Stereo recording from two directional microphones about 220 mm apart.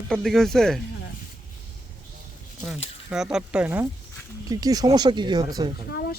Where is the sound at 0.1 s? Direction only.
Centre (ahead or behind).